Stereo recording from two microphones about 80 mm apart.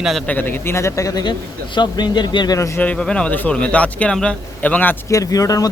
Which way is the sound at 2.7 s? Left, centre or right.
Centre.